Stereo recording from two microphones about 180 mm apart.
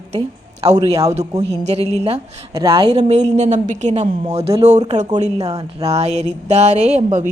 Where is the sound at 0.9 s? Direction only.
35° right (ahead or behind).